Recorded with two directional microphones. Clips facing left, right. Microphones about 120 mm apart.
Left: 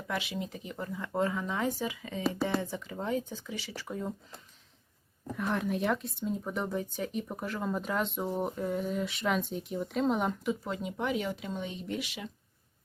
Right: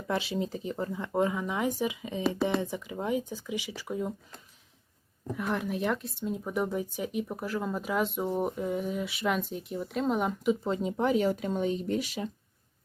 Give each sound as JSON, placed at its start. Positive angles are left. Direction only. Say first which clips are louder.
{"t": 0.1, "sound": "speech", "louder": "right 5 dB", "side_deg": -30}
{"t": 5.4, "sound": "speech", "louder": "even", "side_deg": 0}
{"t": 10.4, "sound": "speech", "louder": "right 6 dB", "side_deg": -20}